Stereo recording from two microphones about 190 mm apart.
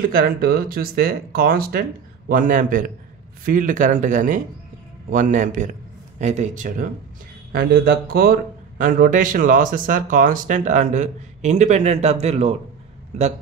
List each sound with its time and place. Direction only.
0.0 s a man's voice: 50° right (ahead or behind)
7.5 s a man's voice: 50° right (ahead or behind); by 12.5 s 35° right (ahead or behind)